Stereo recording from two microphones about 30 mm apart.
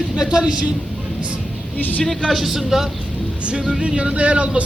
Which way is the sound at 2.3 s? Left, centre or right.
Centre.